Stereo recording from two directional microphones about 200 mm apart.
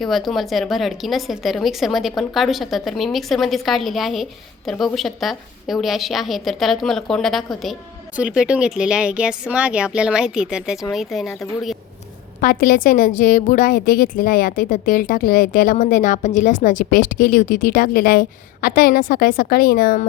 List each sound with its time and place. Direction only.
0.0 s speech: centre (ahead or behind)
12.4 s a woman's voice: 45° left (ahead or behind)